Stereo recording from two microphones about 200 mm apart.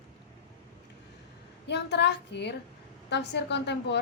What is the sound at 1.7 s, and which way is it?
A woman's voice, 60° left (ahead or behind).